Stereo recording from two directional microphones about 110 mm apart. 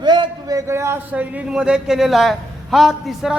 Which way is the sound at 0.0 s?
40° right (ahead or behind).